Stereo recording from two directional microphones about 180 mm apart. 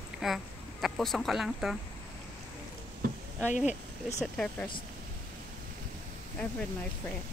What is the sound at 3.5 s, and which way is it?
Speech, 40° left (ahead or behind).